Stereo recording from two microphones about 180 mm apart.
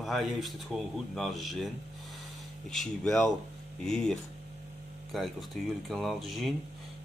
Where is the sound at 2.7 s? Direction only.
Centre (ahead or behind).